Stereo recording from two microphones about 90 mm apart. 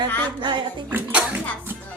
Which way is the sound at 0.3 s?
60° right (ahead or behind).